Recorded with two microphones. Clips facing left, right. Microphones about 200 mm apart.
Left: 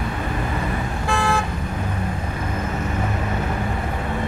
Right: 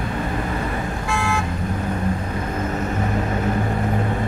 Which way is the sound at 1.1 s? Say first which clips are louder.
Left 3 dB; 35° left (ahead or behind).